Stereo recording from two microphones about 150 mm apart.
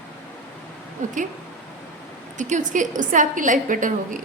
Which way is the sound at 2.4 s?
55° right (ahead or behind).